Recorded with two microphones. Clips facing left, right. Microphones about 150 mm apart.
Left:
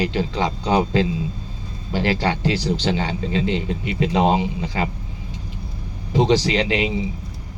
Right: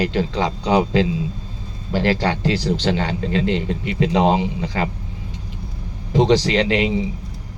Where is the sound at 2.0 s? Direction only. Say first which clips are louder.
Right 1 dB; 10° left (ahead or behind).